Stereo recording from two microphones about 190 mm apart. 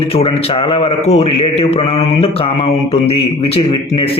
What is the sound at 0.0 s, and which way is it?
A man's voice, 30° left (ahead or behind).